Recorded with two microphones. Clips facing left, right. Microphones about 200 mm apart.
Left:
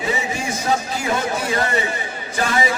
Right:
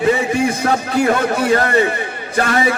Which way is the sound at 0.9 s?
60° right (ahead or behind).